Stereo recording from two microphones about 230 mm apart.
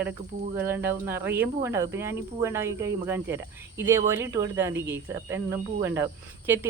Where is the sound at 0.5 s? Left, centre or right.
Centre.